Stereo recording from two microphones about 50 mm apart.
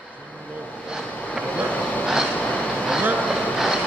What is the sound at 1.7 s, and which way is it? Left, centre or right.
Train, left.